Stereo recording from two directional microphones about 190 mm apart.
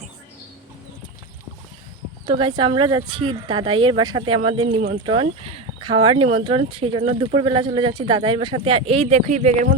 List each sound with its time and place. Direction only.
2.2 s speech: 25° right (ahead or behind)